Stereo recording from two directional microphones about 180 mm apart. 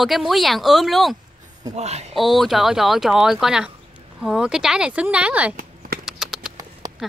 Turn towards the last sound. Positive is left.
turn(degrees=0)  # may be behind; listen again after turning